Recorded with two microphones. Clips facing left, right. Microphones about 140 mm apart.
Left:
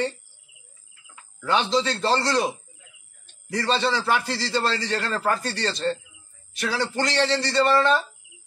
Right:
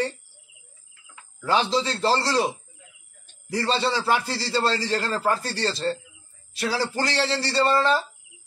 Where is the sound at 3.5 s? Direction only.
30° right (ahead or behind).